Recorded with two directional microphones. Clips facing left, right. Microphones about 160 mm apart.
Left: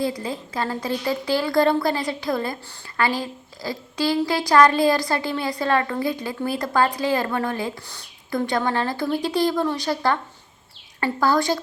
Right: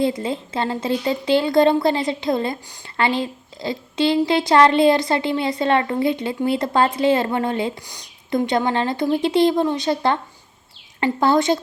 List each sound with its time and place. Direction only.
0.0 s a woman's voice: 25° right (ahead or behind)